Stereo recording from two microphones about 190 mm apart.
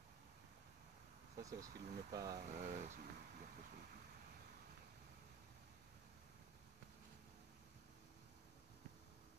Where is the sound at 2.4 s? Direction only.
40° right (ahead or behind).